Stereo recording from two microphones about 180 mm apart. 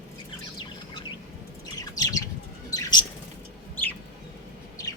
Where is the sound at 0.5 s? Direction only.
25° left (ahead or behind).